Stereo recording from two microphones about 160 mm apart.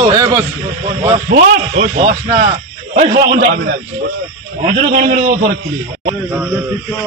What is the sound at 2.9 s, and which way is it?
Speech, 70° right (ahead or behind).